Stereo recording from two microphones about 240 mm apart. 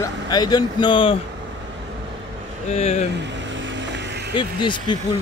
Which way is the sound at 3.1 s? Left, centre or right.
Right.